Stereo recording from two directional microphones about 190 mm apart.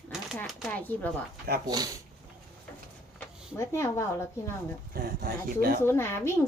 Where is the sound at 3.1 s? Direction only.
15° left (ahead or behind).